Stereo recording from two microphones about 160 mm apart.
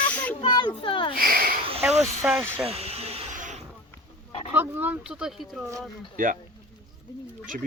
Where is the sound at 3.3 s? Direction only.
50° right (ahead or behind).